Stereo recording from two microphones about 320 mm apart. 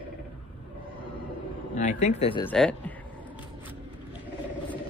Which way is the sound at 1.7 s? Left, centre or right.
Left.